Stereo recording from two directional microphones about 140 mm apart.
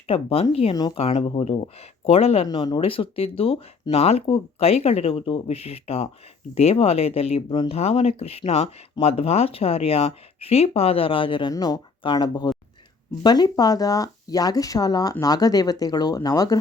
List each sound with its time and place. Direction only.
0.1 s speech: 45° left (ahead or behind)
11.5 s speech: 25° left (ahead or behind)